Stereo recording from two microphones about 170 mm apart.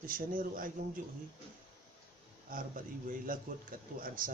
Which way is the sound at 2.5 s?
55° right (ahead or behind).